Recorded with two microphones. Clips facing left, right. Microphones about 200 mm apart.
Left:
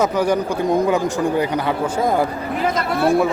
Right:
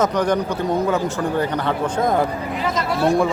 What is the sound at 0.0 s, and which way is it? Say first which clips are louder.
Speech: left 1 dB; 10° left (ahead or behind).